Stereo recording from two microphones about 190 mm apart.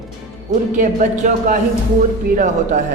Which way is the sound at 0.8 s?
40° right (ahead or behind).